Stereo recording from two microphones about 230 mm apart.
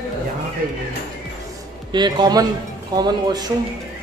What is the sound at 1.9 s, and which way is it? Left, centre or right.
A man's voice, centre.